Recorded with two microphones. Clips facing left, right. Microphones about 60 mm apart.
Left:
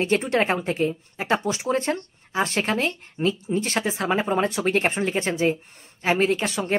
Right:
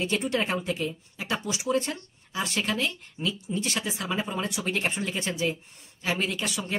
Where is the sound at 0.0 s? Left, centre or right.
Left.